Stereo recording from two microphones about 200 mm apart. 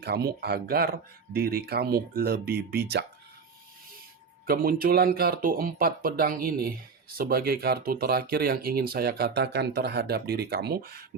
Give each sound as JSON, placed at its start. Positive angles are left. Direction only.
{"t": 0.0, "sound": "speech", "side_deg": -55}
{"t": 4.4, "sound": "speech", "side_deg": -50}